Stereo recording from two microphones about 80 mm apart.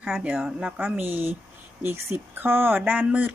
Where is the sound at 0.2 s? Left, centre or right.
Centre.